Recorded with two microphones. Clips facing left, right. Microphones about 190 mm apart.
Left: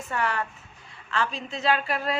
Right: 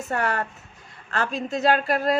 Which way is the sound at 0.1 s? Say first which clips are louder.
Right 2 dB; 45° right (ahead or behind).